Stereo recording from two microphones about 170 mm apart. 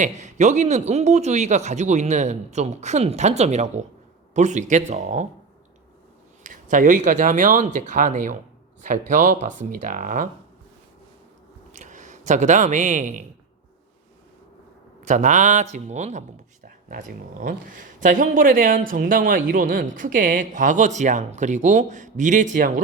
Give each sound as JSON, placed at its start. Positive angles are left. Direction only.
{"t": 0.0, "sound": "speech", "side_deg": -45}
{"t": 6.4, "sound": "speech", "side_deg": -50}
{"t": 11.7, "sound": "speech", "side_deg": -45}
{"t": 15.0, "sound": "speech", "side_deg": -45}
{"t": 17.4, "sound": "speech", "side_deg": -50}